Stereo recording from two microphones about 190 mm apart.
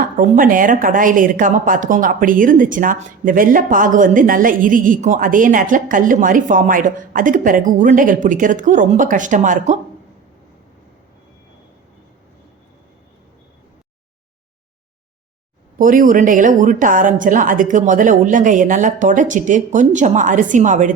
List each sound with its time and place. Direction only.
0.2 s a woman's voice: 45° right (ahead or behind)
15.8 s a woman's voice: 45° right (ahead or behind)